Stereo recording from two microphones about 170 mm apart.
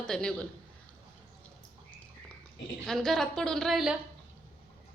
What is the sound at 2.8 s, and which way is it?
A woman's voice, 5° left (ahead or behind).